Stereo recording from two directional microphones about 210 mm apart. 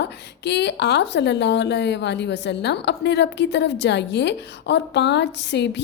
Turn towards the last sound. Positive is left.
turn(degrees=55)  # may be behind; listen again after turning